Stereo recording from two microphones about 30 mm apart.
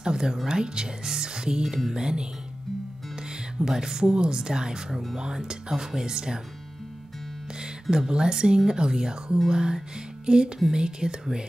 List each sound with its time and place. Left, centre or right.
0.0 s speech: right
3.3 s speech: right
7.9 s speech: right
10.2 s music: right
10.7 s speech: right